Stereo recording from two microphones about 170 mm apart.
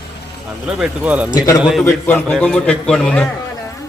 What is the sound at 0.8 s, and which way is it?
Speech, 10° right (ahead or behind).